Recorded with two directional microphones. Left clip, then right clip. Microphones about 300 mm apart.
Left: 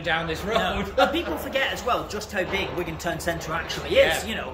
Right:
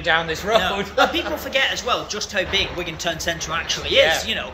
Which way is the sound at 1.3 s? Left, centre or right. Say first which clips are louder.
Right 5 dB; centre.